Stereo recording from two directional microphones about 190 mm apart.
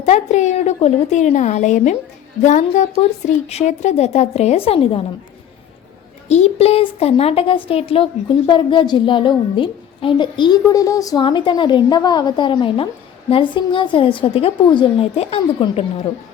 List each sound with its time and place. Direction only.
0.0 s a woman's voice: 35° left (ahead or behind)
6.2 s a woman's voice: 35° left (ahead or behind)